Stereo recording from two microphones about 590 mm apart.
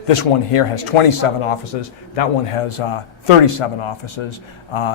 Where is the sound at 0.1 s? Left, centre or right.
Left.